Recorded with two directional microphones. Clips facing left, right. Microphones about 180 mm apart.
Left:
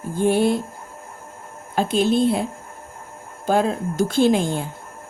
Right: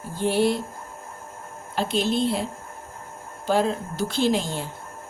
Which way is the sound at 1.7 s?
50° left (ahead or behind).